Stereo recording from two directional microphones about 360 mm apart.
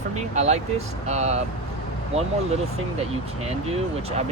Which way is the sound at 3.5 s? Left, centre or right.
Centre.